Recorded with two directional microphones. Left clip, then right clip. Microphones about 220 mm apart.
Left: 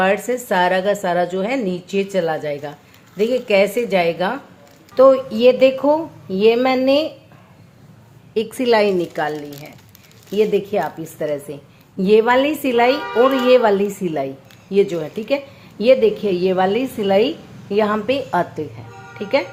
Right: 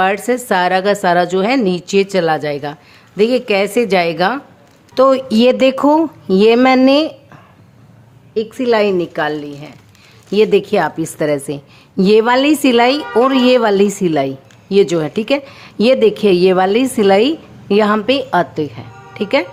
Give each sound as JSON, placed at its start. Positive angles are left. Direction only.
{"t": 0.0, "sound": "a woman's voice", "side_deg": -30}
{"t": 8.3, "sound": "a woman's voice", "side_deg": -5}
{"t": 10.3, "sound": "a woman's voice", "side_deg": -30}